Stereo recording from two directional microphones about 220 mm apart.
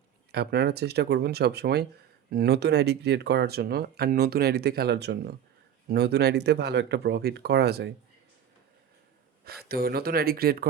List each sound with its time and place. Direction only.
0.3 s speech: 45° right (ahead or behind)
9.6 s speech: 45° right (ahead or behind)